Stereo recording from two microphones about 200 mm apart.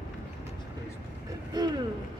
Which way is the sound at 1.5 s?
20° right (ahead or behind).